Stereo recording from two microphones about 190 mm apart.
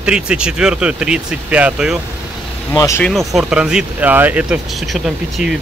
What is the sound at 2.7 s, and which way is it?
Speech, 15° left (ahead or behind).